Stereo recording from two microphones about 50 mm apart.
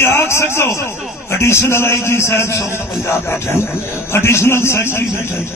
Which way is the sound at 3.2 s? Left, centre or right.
Left.